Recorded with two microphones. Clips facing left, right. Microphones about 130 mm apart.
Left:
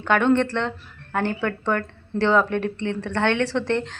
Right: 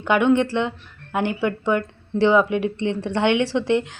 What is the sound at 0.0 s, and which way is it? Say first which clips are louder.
Speech: right 1 dB; 15° right (ahead or behind).